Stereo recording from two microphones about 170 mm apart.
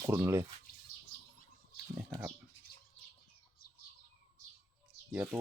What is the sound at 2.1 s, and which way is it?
Speech, 10° right (ahead or behind).